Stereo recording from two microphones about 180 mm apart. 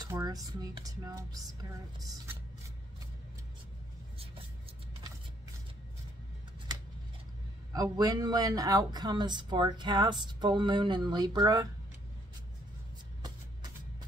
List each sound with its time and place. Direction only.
0.0 s speech: 20° right (ahead or behind)
7.7 s speech: 20° right (ahead or behind)